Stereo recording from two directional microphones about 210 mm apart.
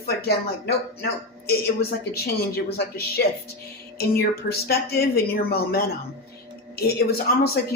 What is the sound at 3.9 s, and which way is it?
A woman's voice, 50° left (ahead or behind).